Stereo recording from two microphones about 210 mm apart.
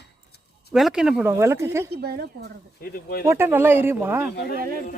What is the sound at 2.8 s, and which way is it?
Speech, 45° left (ahead or behind).